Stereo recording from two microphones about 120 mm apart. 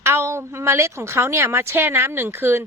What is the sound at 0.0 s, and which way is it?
A woman's voice, 20° right (ahead or behind).